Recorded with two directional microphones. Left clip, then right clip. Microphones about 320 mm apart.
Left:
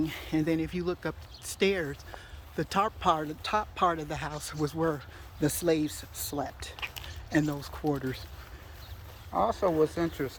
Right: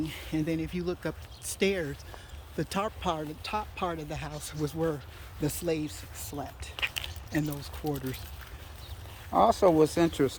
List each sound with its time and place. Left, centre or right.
0.0 s speech: centre
6.7 s a sound: centre
7.6 s speech: centre
9.3 s speech: right